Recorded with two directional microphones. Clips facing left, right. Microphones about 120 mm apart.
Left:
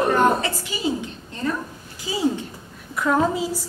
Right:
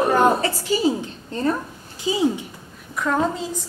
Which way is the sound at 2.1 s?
20° right (ahead or behind).